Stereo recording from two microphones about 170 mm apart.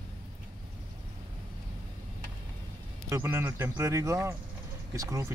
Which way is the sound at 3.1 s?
15° right (ahead or behind).